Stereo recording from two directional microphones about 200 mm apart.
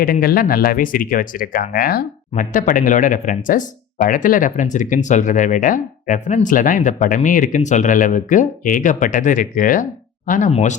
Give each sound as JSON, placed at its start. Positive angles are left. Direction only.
{"t": 0.0, "sound": "speech", "side_deg": 50}